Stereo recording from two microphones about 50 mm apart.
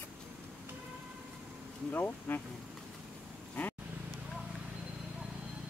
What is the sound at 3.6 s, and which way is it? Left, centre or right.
Vehicle, left.